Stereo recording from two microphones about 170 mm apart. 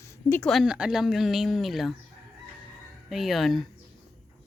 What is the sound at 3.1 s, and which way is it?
Speech, centre (ahead or behind).